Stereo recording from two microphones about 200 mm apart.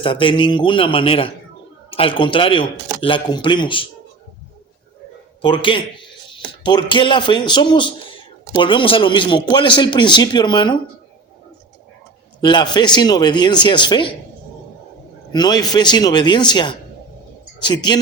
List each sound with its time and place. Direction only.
0.0 s a man's voice: 25° left (ahead or behind)
5.4 s a man's voice: 25° left (ahead or behind)
12.4 s a man's voice: 20° left (ahead or behind)
15.3 s a man's voice: 20° left (ahead or behind)